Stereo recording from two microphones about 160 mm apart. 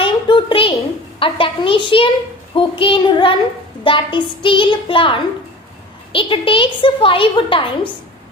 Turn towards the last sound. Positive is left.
turn(degrees=35)  # may be behind; listen again after turning